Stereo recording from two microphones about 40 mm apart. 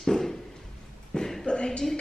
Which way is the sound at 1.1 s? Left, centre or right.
Centre.